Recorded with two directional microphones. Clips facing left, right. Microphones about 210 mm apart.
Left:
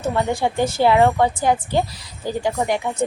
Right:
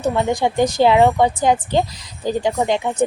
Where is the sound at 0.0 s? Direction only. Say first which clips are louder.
Right 2 dB; 15° right (ahead or behind).